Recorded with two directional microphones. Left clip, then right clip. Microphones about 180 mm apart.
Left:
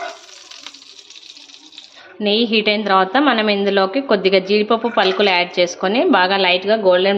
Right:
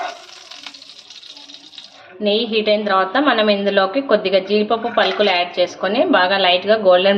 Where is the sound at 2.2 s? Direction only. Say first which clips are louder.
Left 1 dB; 35° left (ahead or behind).